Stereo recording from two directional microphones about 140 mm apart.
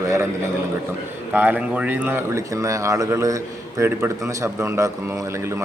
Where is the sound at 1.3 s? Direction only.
10° right (ahead or behind).